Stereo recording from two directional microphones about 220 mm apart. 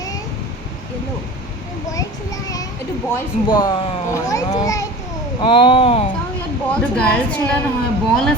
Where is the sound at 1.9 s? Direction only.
15° left (ahead or behind).